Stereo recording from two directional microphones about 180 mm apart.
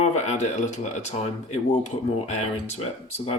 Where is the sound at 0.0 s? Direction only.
40° left (ahead or behind).